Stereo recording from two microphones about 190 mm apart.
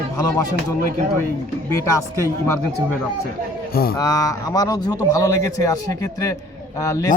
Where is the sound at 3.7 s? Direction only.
50° left (ahead or behind).